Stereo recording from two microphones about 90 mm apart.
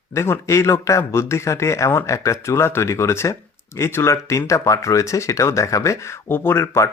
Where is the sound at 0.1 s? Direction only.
30° left (ahead or behind).